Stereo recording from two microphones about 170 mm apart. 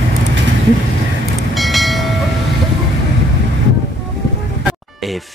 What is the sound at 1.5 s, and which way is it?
Train, centre (ahead or behind).